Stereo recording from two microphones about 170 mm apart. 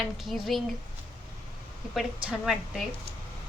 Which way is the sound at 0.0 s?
Centre (ahead or behind).